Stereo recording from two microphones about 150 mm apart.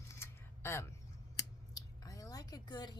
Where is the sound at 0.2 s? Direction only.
15° left (ahead or behind).